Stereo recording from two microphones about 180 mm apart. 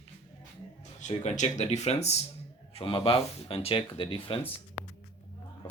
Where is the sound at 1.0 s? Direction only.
40° left (ahead or behind).